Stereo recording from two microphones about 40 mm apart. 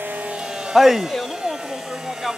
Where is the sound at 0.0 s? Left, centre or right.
Right.